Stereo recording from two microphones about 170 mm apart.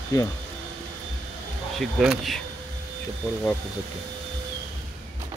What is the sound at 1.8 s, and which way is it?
Speech, centre (ahead or behind).